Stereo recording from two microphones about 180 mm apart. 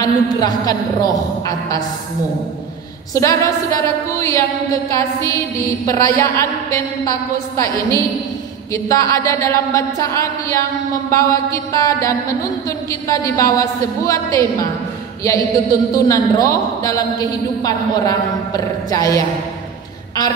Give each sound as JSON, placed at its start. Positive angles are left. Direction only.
{"t": 0.0, "sound": "a man's voice", "side_deg": 20}
{"t": 3.2, "sound": "mantra", "side_deg": 15}
{"t": 15.2, "sound": "a man's voice", "side_deg": 20}